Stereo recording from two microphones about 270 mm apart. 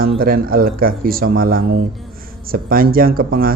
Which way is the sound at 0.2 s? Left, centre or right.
Right.